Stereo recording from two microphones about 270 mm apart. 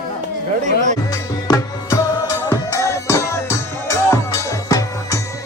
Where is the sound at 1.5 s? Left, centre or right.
Centre.